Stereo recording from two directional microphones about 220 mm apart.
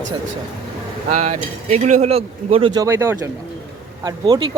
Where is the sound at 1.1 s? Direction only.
35° right (ahead or behind).